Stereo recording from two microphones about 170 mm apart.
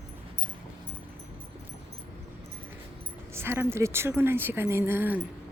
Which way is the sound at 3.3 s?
15° right (ahead or behind).